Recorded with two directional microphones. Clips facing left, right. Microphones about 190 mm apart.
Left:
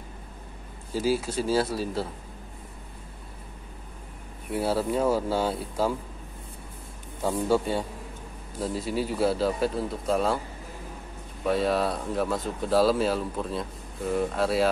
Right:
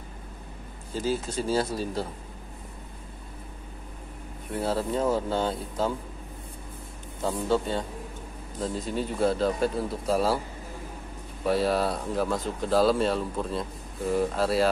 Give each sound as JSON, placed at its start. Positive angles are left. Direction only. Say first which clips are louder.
{"t": 0.9, "sound": "speech", "louder": "left 3 dB", "side_deg": 10}
{"t": 4.5, "sound": "speech", "louder": "left 2 dB", "side_deg": 10}
{"t": 7.2, "sound": "speech", "louder": "left 2 dB", "side_deg": 10}
{"t": 11.4, "sound": "speech", "louder": "even", "side_deg": 0}